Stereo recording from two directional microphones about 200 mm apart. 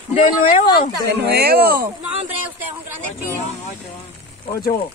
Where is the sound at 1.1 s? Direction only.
55° right (ahead or behind).